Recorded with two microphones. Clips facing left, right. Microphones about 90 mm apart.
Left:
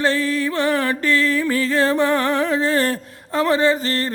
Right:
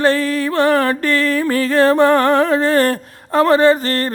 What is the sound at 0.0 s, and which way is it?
Music, 50° right (ahead or behind).